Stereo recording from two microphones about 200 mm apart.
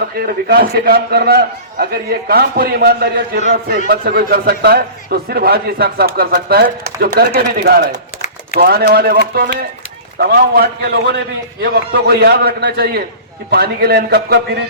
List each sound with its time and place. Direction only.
0.3 s a man's voice: 50° right (ahead or behind)